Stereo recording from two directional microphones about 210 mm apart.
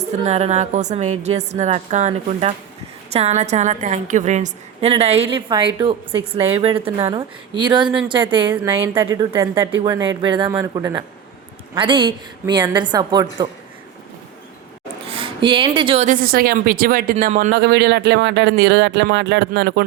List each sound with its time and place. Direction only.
0.3 s a woman's voice: 30° right (ahead or behind)
15.1 s a woman's voice: 25° right (ahead or behind)
16.0 s speech: 40° right (ahead or behind)
17.5 s speech: 50° right (ahead or behind)